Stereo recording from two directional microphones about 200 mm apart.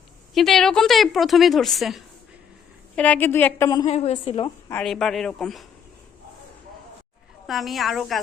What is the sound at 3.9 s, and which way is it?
Speech, 30° left (ahead or behind).